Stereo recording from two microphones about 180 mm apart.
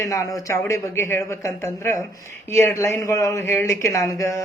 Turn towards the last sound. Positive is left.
turn(degrees=15)  # may be behind; listen again after turning